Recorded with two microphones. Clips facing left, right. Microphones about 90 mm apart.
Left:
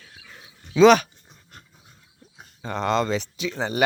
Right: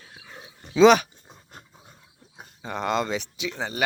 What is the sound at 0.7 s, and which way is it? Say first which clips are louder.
Speech: left 1 dB; 15° right (ahead or behind).